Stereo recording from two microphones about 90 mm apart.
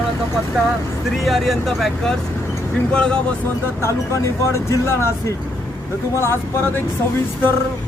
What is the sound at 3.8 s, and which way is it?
Speech, 30° left (ahead or behind).